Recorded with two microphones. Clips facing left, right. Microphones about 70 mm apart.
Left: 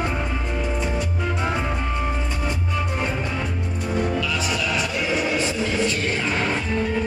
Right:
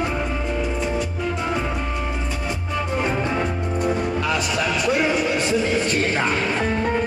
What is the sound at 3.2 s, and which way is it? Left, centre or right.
Music, right.